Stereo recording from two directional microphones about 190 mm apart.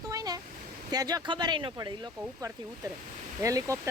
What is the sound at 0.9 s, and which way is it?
Speech, 20° right (ahead or behind).